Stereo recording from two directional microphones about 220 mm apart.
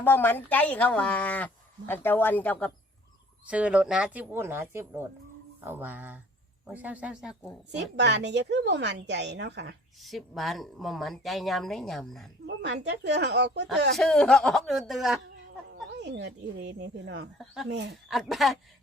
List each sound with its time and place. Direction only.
0.0 s speech: 10° left (ahead or behind)
3.4 s speech: 5° right (ahead or behind)
7.8 s a woman's voice: 50° right (ahead or behind)
10.0 s speech: centre (ahead or behind)
12.5 s a woman's voice: 50° right (ahead or behind)
13.9 s speech: centre (ahead or behind)
16.0 s a woman's voice: 50° right (ahead or behind)
17.3 s speech: centre (ahead or behind)
17.7 s a woman's voice: 50° right (ahead or behind)
17.9 s speech: centre (ahead or behind)